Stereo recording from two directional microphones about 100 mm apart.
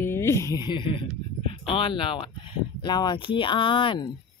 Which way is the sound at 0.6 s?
55° left (ahead or behind).